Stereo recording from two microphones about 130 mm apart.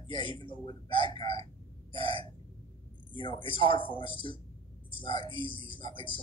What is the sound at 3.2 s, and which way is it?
A woman's voice, 40° left (ahead or behind).